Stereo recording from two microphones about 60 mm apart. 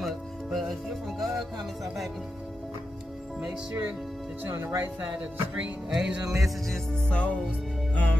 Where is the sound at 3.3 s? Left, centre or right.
Centre.